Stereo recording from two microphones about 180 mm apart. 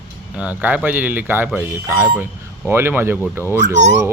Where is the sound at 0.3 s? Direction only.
10° right (ahead or behind).